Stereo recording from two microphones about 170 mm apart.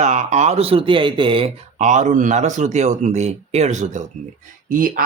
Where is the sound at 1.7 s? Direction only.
45° right (ahead or behind).